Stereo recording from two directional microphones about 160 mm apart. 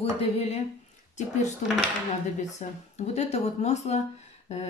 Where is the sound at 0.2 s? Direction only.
40° left (ahead or behind).